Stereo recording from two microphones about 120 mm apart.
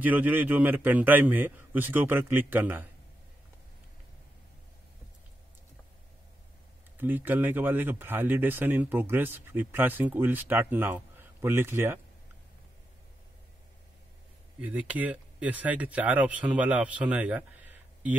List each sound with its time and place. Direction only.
0.0 s speech: 15° right (ahead or behind)
7.0 s speech: 15° right (ahead or behind)
14.6 s speech: 10° right (ahead or behind)